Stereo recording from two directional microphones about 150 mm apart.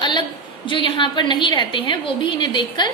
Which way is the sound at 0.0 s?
30° left (ahead or behind).